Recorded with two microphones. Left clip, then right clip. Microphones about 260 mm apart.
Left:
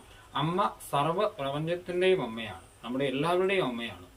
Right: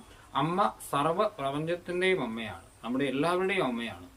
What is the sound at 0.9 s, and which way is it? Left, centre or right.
Speech, centre.